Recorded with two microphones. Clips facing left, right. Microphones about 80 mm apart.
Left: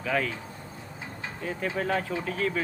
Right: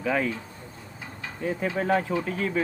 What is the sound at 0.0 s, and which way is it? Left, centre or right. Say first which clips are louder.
Speech: right 2 dB; centre.